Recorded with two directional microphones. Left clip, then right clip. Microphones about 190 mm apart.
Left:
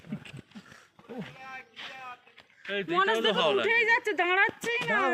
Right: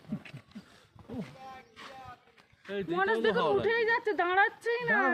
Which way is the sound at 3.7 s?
25° left (ahead or behind).